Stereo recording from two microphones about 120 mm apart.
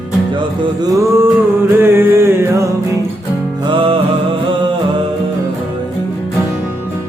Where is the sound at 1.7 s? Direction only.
15° right (ahead or behind).